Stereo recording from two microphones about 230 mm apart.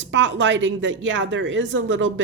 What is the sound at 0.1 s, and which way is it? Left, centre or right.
Speech, right.